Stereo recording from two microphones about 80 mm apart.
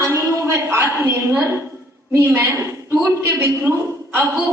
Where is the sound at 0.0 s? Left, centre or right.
Right.